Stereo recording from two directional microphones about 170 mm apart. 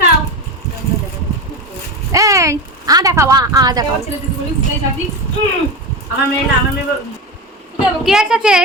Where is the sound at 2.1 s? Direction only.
20° right (ahead or behind).